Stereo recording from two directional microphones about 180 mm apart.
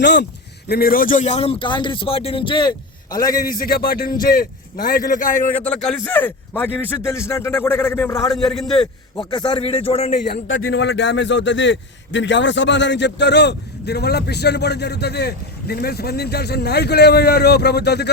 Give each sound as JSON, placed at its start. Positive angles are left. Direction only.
{"t": 0.0, "sound": "speech", "side_deg": 70}
{"t": 0.7, "sound": "a man's voice", "side_deg": 55}
{"t": 3.4, "sound": "a man's voice", "side_deg": 55}
{"t": 5.5, "sound": "a man's voice", "side_deg": 5}
{"t": 8.3, "sound": "a man's voice", "side_deg": 0}
{"t": 9.3, "sound": "a man's voice", "side_deg": 25}
{"t": 10.2, "sound": "a man's voice", "side_deg": 60}